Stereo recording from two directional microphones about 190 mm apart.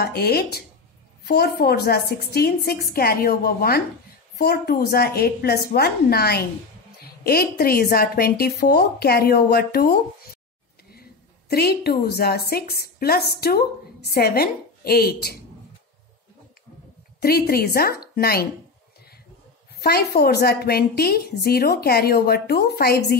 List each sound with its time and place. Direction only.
0.0 s a woman's voice: 55° left (ahead or behind)
17.2 s a woman's voice: 55° left (ahead or behind)
19.7 s a woman's voice: 55° left (ahead or behind)